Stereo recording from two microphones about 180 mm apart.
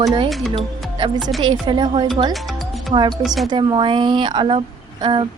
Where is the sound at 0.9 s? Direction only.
25° right (ahead or behind).